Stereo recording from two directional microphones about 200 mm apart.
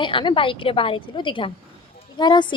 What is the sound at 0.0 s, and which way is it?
A woman's voice, 25° left (ahead or behind).